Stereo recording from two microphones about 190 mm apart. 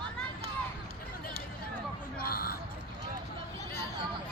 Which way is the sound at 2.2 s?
50° left (ahead or behind).